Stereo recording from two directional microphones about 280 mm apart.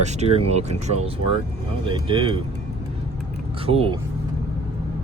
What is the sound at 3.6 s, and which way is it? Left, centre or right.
Speech, right.